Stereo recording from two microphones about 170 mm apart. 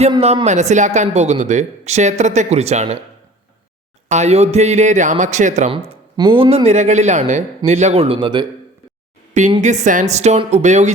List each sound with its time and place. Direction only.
0.1 s a man's voice: 30° right (ahead or behind)
4.1 s a man's voice: 40° right (ahead or behind)
5.7 s speech: 30° right (ahead or behind)
9.6 s a man's voice: 45° right (ahead or behind)